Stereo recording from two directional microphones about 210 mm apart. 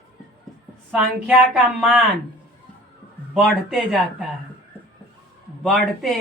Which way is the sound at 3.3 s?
Centre (ahead or behind).